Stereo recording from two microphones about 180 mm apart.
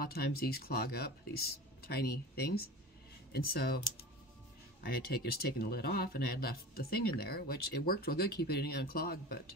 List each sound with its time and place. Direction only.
0.0 s speech: 60° left (ahead or behind)
4.8 s speech: 60° left (ahead or behind)